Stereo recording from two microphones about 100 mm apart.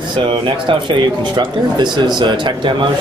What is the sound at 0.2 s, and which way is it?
Speech, 55° right (ahead or behind).